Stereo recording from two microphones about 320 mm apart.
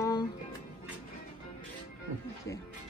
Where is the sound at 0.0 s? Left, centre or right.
Centre.